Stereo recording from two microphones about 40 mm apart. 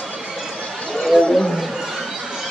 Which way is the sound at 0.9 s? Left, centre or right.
Centre.